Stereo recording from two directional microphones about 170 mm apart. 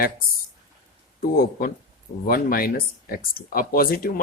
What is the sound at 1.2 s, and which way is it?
Speech, 60° left (ahead or behind).